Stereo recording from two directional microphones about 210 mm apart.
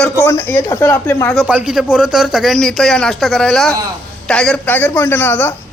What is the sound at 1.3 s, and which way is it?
A woman's voice, 5° right (ahead or behind).